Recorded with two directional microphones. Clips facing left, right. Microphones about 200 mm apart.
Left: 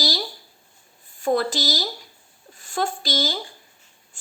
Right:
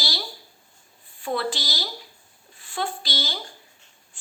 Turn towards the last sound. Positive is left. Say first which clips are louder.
# left 5 dB
turn(degrees=45)  # may be behind; listen again after turning